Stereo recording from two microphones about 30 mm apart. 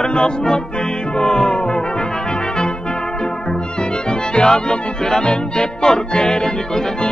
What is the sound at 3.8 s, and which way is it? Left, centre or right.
Music, left.